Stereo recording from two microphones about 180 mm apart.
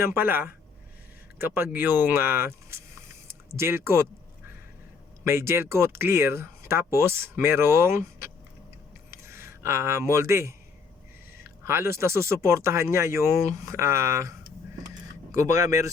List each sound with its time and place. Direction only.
0.0 s speech: 10° right (ahead or behind)
5.2 s speech: 15° right (ahead or behind)
9.0 s a sound: 15° right (ahead or behind)
11.4 s speech: 15° right (ahead or behind)